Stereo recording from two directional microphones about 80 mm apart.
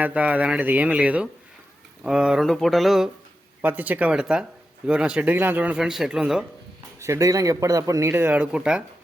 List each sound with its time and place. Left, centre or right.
0.0 s speech: centre
2.5 s mantra: centre
3.6 s speech: right
4.1 s speech: centre
5.8 s mantra: centre
7.0 s a man's voice: right
8.1 s speech: right
8.4 s speech: centre